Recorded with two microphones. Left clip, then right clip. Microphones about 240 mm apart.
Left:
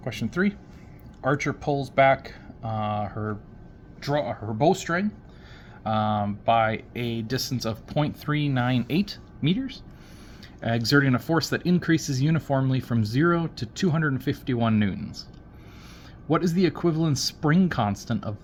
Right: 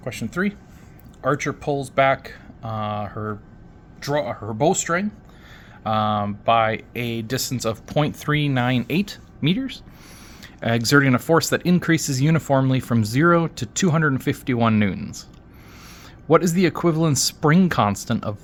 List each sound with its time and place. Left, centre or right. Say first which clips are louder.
0.0 s speech: right 2 dB; centre; by 15.1 s right
16.3 s speech: right 6 dB; right